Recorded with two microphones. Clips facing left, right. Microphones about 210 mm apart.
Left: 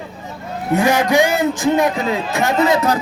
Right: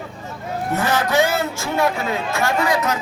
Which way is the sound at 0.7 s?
15° left (ahead or behind).